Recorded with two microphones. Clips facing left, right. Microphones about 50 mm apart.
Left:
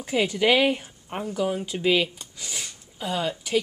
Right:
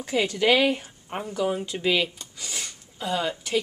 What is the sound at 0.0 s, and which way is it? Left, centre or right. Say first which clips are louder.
Speech: left 1 dB; centre.